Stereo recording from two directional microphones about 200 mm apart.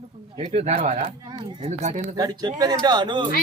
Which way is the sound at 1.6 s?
35° right (ahead or behind).